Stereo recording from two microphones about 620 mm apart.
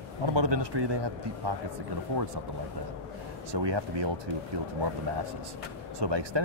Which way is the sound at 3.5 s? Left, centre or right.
Right.